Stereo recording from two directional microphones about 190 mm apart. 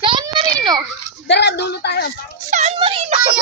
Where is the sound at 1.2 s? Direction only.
65° left (ahead or behind).